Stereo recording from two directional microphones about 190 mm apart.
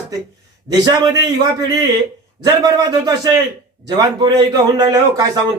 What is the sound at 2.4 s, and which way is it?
Speech, 20° right (ahead or behind).